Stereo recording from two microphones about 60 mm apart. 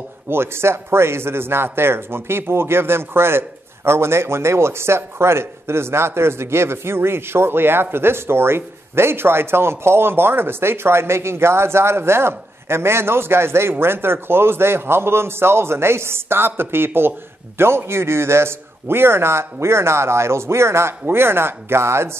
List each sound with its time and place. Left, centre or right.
0.3 s speech: right